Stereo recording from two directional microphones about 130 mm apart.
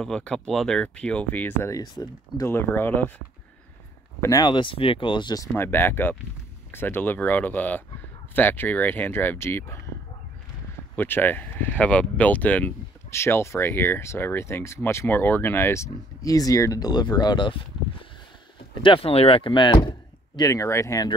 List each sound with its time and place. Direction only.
0.0 s speech: 5° left (ahead or behind)
1.7 s speech: 30° left (ahead or behind)
4.2 s speech: 30° left (ahead or behind)
5.6 s speech: 15° left (ahead or behind)
11.0 s speech: 15° left (ahead or behind); by 17.6 s 35° left (ahead or behind)
18.8 s speech: 45° left (ahead or behind); by 21.1 s 25° left (ahead or behind)